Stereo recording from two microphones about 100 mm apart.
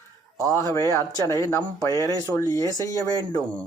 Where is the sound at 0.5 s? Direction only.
35° left (ahead or behind).